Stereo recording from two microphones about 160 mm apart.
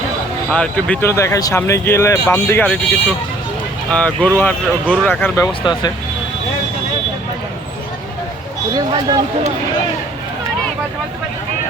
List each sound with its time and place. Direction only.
0.5 s speech: 10° left (ahead or behind)
8.9 s speech: 25° right (ahead or behind)